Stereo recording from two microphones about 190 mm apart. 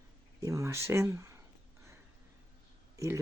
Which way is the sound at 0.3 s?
15° right (ahead or behind).